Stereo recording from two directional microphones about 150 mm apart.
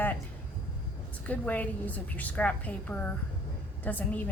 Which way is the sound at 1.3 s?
10° left (ahead or behind).